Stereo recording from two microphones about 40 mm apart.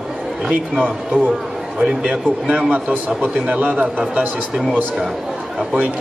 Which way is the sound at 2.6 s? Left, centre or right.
Right.